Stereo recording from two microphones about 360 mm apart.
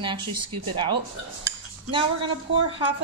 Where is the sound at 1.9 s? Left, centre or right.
Centre.